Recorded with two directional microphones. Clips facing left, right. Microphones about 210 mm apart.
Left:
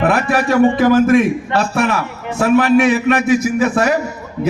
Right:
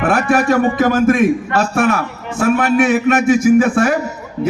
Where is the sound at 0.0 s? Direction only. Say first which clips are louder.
Right 1 dB; 50° right (ahead or behind).